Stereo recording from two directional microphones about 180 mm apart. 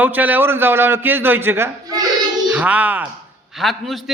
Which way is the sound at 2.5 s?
10° right (ahead or behind).